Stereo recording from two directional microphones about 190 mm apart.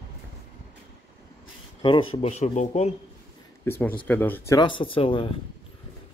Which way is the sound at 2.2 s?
35° left (ahead or behind).